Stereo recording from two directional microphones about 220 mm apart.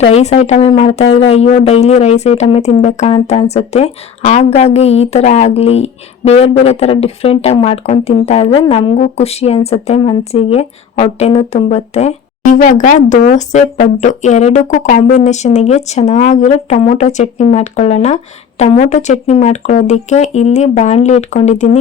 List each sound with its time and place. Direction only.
0.0 s speech: 30° left (ahead or behind)